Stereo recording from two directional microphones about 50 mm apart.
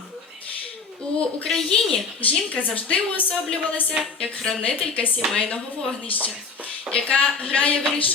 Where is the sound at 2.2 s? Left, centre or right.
Left.